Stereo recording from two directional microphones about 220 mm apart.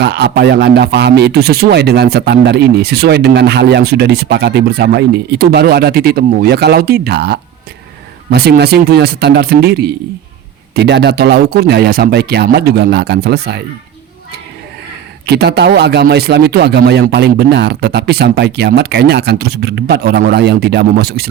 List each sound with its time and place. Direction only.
0.0 s speech: 50° right (ahead or behind)
15.3 s speech: 50° right (ahead or behind)